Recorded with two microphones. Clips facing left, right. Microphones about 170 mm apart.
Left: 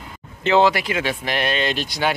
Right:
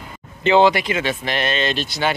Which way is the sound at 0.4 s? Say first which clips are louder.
Right 2 dB; centre (ahead or behind).